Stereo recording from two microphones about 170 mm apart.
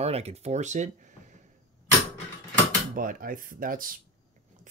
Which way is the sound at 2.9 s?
55° right (ahead or behind).